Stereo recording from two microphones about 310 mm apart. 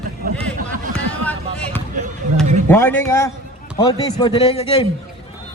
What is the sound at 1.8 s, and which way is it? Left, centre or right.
Speech, right.